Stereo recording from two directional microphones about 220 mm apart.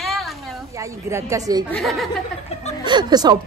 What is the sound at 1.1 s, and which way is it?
Speech, 15° right (ahead or behind).